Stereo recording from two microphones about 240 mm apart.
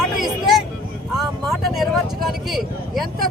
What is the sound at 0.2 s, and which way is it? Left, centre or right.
Vehicle, centre.